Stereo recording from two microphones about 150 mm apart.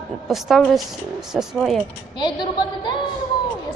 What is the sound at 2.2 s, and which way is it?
Speech, 30° left (ahead or behind).